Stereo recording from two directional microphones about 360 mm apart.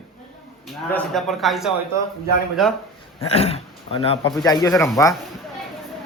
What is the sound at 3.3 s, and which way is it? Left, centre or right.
A man's voice, centre.